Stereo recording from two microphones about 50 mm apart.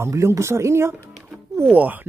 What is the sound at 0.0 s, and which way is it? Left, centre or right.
Speech, right.